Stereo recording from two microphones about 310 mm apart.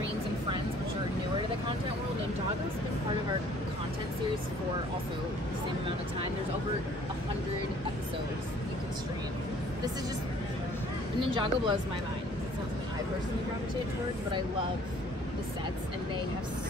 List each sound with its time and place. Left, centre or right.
11.1 s speech: centre